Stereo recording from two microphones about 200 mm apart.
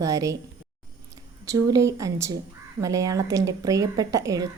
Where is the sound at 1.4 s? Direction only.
15° right (ahead or behind).